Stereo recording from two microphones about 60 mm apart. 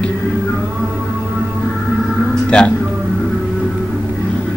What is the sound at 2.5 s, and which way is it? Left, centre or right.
Speech, centre.